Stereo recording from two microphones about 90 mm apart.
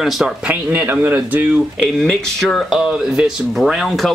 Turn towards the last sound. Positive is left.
turn(degrees=-5)  # may be behind; listen again after turning